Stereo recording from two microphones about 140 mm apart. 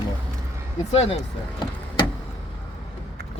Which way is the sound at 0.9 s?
45° left (ahead or behind).